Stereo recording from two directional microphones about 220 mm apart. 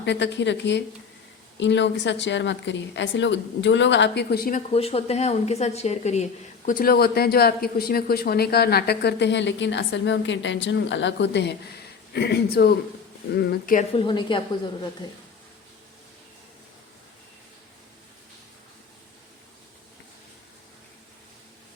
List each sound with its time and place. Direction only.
0.0 s speech: 50° left (ahead or behind)
4.7 s speech: 25° left (ahead or behind)
13.9 s speech: 20° left (ahead or behind)